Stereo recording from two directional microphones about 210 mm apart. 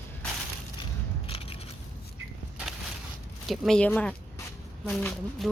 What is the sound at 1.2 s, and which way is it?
Biting, 25° left (ahead or behind).